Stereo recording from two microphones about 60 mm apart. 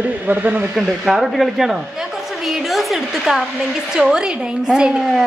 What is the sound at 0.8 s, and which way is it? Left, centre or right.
A woman's voice, centre.